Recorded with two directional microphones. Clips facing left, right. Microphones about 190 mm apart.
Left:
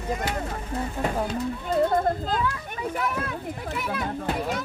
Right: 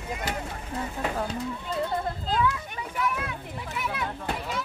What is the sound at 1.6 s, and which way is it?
A child's voice, 50° left (ahead or behind).